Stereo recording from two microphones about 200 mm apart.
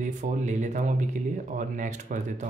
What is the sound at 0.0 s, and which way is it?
Speech, 35° right (ahead or behind).